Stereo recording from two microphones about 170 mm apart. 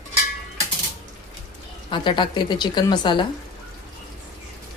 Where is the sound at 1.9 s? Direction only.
30° left (ahead or behind).